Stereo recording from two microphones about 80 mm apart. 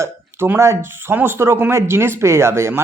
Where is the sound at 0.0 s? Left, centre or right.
Right.